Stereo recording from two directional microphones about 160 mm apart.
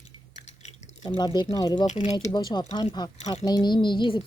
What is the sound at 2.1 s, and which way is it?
Speech, 25° left (ahead or behind).